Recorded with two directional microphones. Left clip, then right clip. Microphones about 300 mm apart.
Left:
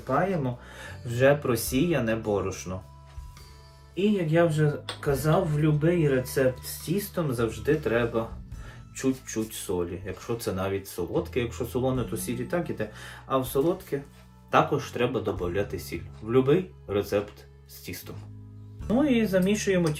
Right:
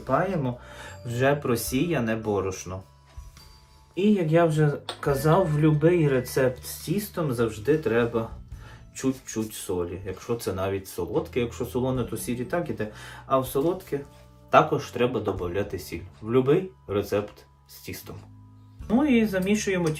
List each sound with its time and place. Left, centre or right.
0.1 s speech: centre
3.9 s speech: centre